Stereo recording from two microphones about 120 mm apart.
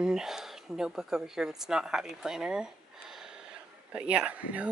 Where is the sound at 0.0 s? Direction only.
5° right (ahead or behind).